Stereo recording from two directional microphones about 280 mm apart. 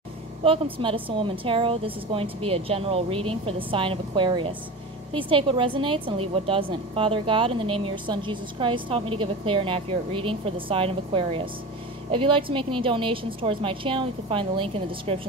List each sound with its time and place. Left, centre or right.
0.7 s a woman's voice: centre